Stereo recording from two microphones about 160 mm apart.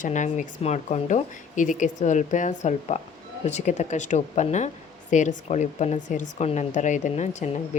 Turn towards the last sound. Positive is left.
turn(degrees=50)  # may be behind; listen again after turning